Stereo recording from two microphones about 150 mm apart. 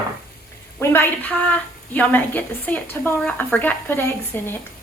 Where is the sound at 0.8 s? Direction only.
15° left (ahead or behind).